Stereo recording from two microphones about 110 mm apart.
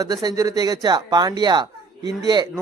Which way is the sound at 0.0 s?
35° right (ahead or behind).